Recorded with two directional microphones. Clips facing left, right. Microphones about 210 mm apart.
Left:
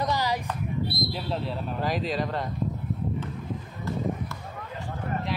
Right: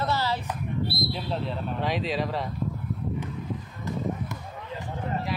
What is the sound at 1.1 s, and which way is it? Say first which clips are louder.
Speech: even; centre (ahead or behind).